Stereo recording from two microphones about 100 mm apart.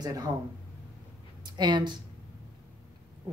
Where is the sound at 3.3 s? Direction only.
40° right (ahead or behind).